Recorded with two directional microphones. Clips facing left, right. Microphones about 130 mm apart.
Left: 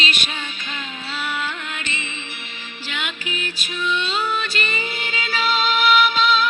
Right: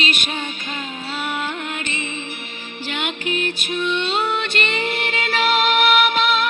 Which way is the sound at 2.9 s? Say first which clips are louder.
Right 5 dB; 55° right (ahead or behind).